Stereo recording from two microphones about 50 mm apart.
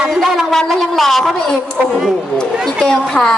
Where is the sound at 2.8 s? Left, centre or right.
Centre.